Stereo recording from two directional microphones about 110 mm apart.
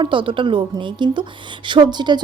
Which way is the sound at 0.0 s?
50° right (ahead or behind).